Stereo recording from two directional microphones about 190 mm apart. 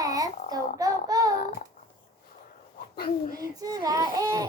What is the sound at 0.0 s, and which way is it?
Child singing, 20° right (ahead or behind).